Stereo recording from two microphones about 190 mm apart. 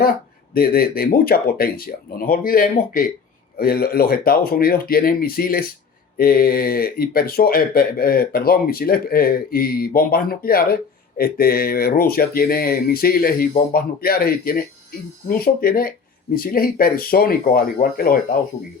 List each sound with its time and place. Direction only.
0.5 s speech: 50° left (ahead or behind)